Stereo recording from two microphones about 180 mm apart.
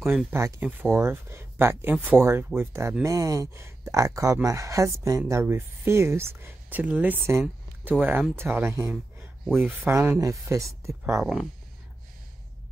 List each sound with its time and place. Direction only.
0.0 s speech: 10° right (ahead or behind)
9.4 s speech: centre (ahead or behind)
9.8 s speech: 15° right (ahead or behind)